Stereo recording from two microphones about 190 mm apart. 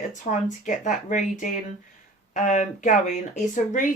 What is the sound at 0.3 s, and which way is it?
Speech, 40° left (ahead or behind).